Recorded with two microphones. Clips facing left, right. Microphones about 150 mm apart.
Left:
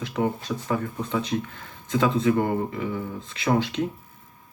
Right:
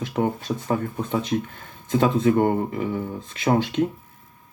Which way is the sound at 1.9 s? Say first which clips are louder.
Right 2 dB; 50° right (ahead or behind).